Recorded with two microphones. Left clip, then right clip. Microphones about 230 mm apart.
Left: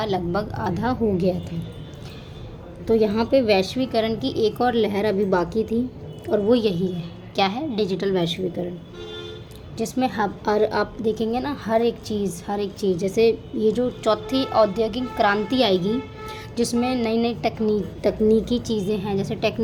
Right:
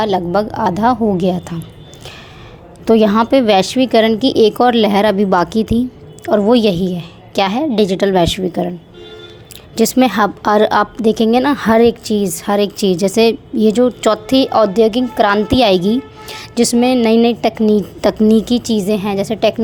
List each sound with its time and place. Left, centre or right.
0.0 s a woman's voice: right
2.8 s a woman's voice: right
9.7 s a woman's voice: right